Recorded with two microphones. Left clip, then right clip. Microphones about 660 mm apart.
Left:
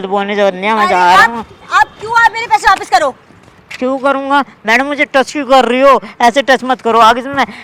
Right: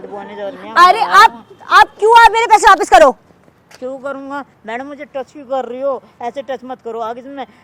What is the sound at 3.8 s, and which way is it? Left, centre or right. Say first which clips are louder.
Speech: left 11 dB; left.